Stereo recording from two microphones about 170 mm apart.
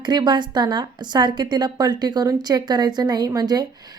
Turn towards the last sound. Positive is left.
turn(degrees=-25)  # may be behind; listen again after turning